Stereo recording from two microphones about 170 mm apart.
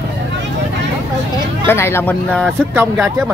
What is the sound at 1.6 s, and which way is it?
Speech, 15° left (ahead or behind).